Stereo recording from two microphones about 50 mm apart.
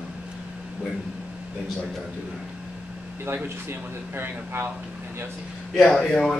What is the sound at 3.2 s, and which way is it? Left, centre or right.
Speech, right.